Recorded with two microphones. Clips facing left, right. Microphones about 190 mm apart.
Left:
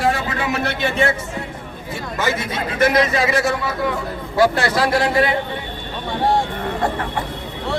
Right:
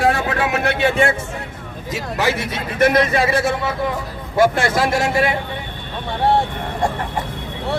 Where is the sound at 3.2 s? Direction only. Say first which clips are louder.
Right 1 dB; 30° right (ahead or behind).